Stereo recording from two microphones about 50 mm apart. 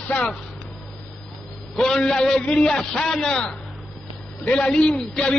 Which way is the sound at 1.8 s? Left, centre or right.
Centre.